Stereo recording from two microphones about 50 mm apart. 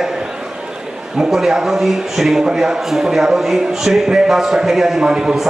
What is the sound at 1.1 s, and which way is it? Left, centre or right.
A man's voice, centre.